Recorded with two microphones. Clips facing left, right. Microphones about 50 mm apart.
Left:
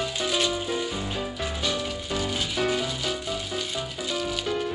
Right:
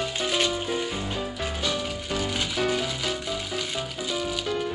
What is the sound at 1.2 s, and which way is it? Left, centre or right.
Music, centre.